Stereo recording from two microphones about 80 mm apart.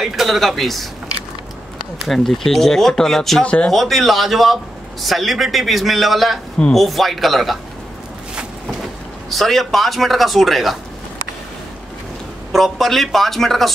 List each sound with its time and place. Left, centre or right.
0.0 s speech: centre
2.0 s speech: centre
3.4 s speech: centre
3.7 s speech: centre
9.3 s speech: centre
12.5 s speech: centre